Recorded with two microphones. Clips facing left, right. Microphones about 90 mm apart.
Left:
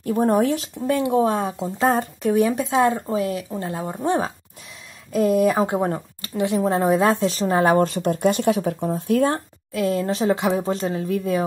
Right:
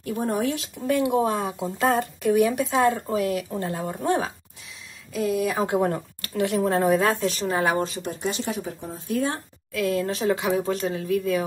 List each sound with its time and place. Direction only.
0.0 s speech: 40° left (ahead or behind)
0.8 s speech: 30° left (ahead or behind)
2.5 s speech: 20° left (ahead or behind)
5.1 s speech: 50° left (ahead or behind)
5.7 s speech: 25° left (ahead or behind)
7.8 s speech: 55° left (ahead or behind)
9.7 s speech: 30° left (ahead or behind)